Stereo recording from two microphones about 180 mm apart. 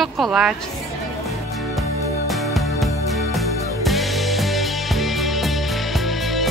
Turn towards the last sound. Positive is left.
turn(degrees=0)  # may be behind; listen again after turning